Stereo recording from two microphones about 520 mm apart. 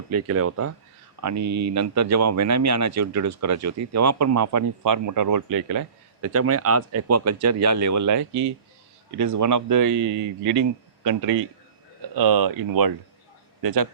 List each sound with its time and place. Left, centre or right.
0.1 s speech: right